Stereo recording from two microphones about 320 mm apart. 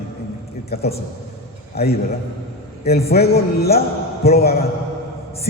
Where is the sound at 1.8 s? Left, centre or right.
Left.